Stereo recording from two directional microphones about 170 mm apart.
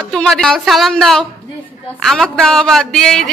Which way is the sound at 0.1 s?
Centre (ahead or behind).